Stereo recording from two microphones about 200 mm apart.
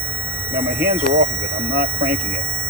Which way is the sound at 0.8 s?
90° right.